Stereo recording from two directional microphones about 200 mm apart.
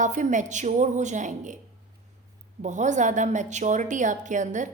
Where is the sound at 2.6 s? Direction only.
35° right (ahead or behind).